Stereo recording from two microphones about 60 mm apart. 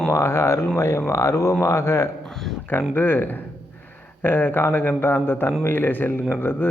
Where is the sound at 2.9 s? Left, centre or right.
Left.